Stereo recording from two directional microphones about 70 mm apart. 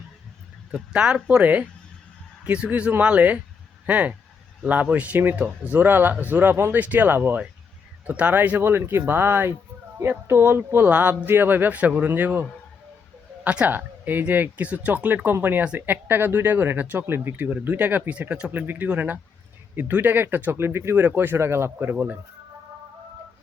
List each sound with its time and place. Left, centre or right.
0.7 s speech: centre
1.1 s speech: right